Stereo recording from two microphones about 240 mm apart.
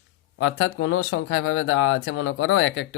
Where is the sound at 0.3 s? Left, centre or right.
Left.